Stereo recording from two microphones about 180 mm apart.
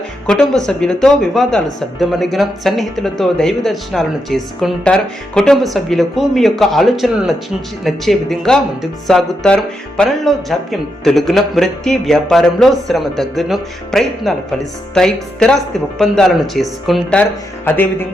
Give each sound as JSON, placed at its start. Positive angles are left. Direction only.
{"t": 0.3, "sound": "a man's voice", "side_deg": 5}